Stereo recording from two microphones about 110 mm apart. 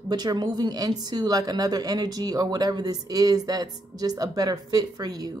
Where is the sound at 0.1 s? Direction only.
40° right (ahead or behind).